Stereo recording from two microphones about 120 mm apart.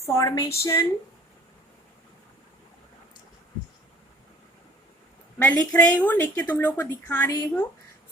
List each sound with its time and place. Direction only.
0.0 s speech: 25° left (ahead or behind)
5.4 s speech: 10° left (ahead or behind)